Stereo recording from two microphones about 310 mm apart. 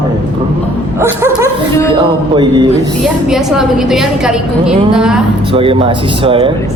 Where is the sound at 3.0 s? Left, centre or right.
Centre.